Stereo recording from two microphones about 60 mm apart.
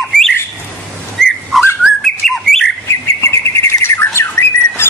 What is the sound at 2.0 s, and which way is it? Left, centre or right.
Bird, centre.